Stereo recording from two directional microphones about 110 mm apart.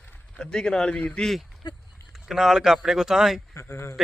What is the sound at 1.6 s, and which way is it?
Speech, 40° left (ahead or behind).